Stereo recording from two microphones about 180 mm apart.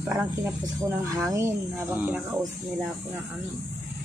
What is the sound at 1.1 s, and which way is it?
Speech, 15° right (ahead or behind).